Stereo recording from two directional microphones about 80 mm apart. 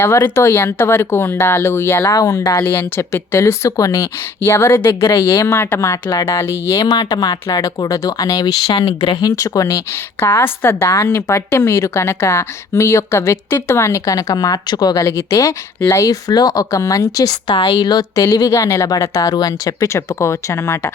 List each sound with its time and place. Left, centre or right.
0.0 s a woman's voice: left
2.1 s speech: left
2.6 s a woman's voice: left
4.4 s a woman's voice: left
6.1 s speech: left
6.8 s speech: left
8.7 s speech: left
9.3 s speech: left
10.2 s a woman's voice: left
15.0 s speech: left